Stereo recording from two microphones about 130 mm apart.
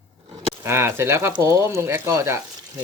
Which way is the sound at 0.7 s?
20° right (ahead or behind).